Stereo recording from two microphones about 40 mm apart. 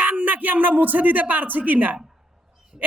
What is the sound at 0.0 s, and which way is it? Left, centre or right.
A man's voice, right.